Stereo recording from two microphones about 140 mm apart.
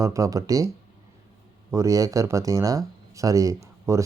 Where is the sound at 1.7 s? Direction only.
20° right (ahead or behind).